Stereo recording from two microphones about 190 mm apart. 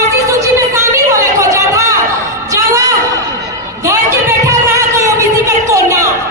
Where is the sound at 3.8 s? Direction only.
15° right (ahead or behind).